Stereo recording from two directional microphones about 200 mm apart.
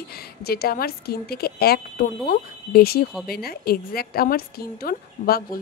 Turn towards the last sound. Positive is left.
turn(degrees=50)  # may be behind; listen again after turning